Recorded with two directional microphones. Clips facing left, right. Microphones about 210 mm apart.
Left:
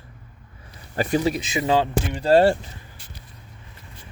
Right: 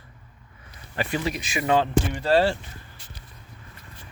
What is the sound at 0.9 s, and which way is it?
Speech, 40° left (ahead or behind).